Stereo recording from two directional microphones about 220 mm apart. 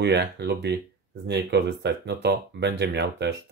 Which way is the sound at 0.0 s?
50° right (ahead or behind).